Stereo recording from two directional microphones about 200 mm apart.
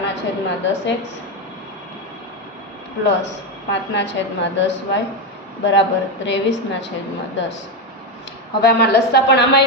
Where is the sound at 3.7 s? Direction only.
65° left (ahead or behind).